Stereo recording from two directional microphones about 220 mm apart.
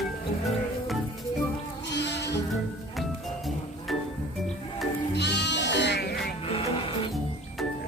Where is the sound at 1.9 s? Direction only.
50° left (ahead or behind).